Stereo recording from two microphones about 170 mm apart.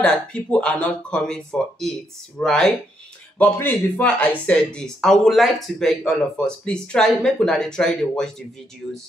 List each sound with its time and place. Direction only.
0.0 s speech: 5° left (ahead or behind)